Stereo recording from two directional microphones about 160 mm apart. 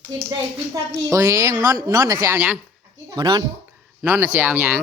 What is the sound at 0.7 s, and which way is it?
A woman's voice, 20° right (ahead or behind).